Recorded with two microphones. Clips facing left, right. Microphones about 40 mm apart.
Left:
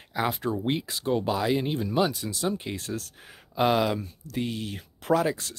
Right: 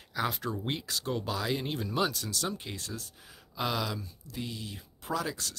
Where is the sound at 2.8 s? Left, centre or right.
Left.